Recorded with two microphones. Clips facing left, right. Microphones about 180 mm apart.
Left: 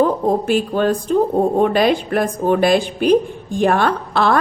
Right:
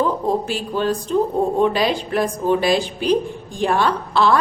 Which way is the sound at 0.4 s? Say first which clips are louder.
Left 5 dB; 55° left (ahead or behind).